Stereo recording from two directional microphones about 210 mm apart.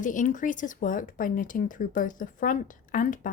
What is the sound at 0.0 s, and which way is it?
Speech, 35° left (ahead or behind).